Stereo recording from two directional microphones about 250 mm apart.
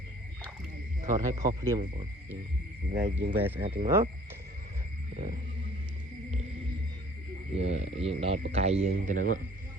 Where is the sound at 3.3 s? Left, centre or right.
Centre.